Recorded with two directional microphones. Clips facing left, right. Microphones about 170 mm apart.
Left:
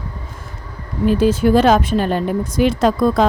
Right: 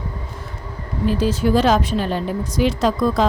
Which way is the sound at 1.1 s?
55° left (ahead or behind).